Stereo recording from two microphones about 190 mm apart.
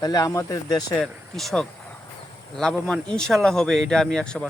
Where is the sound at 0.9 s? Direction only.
Centre (ahead or behind).